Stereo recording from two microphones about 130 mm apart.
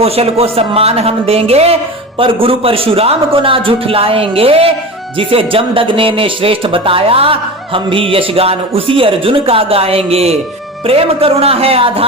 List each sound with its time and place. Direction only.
0.0 s speech: 50° right (ahead or behind)